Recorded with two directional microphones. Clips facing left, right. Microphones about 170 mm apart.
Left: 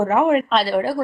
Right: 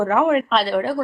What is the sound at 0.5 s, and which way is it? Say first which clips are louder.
Speech: left 1 dB; 5° left (ahead or behind).